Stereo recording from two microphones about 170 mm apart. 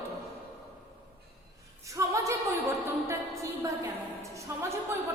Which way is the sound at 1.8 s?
20° right (ahead or behind).